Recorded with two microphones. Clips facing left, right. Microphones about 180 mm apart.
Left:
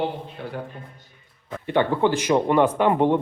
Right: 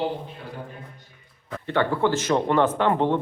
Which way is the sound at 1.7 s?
15° left (ahead or behind).